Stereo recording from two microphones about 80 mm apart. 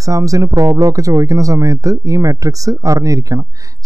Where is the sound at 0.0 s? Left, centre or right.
Right.